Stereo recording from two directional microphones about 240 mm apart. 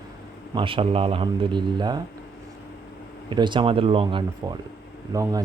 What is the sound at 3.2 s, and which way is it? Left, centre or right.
Speech, centre.